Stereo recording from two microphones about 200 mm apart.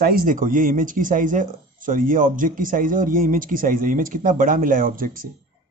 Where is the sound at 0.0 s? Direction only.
45° right (ahead or behind).